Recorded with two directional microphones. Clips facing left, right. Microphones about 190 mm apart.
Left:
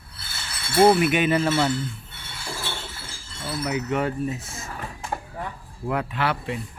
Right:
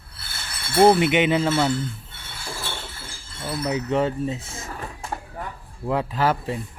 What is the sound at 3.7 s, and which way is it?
Speech, 30° right (ahead or behind).